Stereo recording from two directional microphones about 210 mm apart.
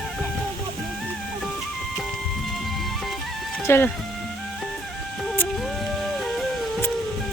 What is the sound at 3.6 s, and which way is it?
Speech, 10° left (ahead or behind).